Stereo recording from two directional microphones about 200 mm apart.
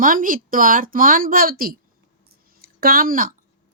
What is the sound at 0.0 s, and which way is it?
A woman's voice, 45° right (ahead or behind).